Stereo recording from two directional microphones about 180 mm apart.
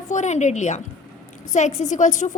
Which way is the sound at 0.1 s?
40° left (ahead or behind).